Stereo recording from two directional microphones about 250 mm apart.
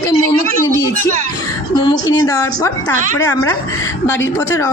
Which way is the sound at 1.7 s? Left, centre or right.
Centre.